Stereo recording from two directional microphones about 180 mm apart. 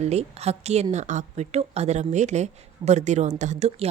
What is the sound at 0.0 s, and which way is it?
A woman's voice, 35° right (ahead or behind).